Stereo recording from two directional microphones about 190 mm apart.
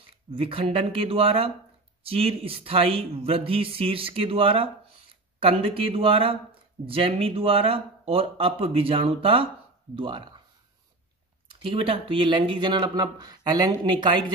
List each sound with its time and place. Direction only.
0.3 s speech: 30° right (ahead or behind)
11.6 s speech: 30° right (ahead or behind)